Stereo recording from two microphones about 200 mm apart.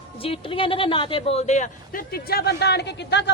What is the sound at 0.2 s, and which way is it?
A man's voice, 25° left (ahead or behind).